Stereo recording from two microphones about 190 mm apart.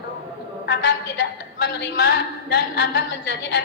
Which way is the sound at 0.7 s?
65° left (ahead or behind).